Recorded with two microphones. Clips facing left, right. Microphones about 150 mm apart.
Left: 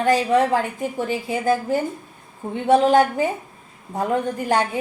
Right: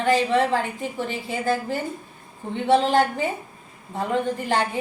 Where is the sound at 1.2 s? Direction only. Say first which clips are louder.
Left 4 dB; 45° left (ahead or behind).